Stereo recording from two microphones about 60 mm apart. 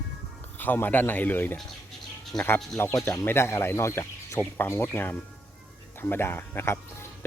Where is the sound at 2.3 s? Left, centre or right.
Left.